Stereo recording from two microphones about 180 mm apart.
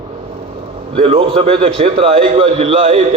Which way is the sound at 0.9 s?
30° right (ahead or behind).